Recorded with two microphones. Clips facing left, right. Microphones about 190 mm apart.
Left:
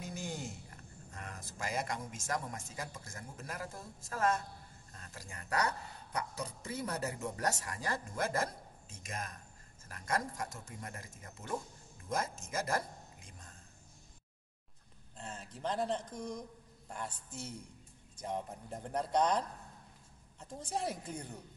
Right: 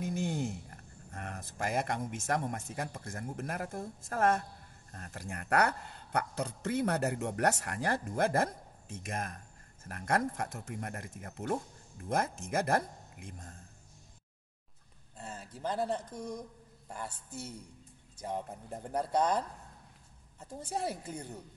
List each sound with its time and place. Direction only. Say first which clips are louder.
0.0 s speech: right 8 dB; 55° right (ahead or behind)
15.1 s a woman's voice: right 2 dB; 5° right (ahead or behind)